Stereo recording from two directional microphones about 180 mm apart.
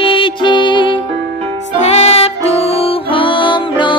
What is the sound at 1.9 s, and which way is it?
Music, 35° left (ahead or behind).